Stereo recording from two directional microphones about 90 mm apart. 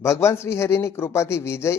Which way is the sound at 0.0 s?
30° left (ahead or behind).